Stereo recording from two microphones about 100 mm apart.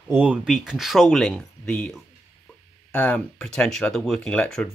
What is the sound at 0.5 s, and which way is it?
Speech, centre (ahead or behind).